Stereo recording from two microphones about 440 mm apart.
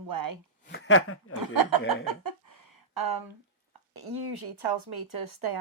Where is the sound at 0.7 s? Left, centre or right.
Left.